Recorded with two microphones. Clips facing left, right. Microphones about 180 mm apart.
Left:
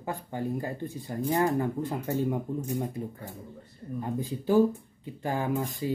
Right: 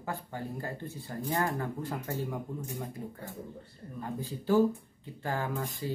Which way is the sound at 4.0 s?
15° left (ahead or behind).